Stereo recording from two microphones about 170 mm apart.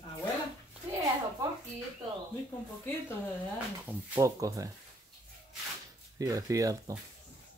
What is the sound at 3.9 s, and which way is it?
Speech, 15° right (ahead or behind).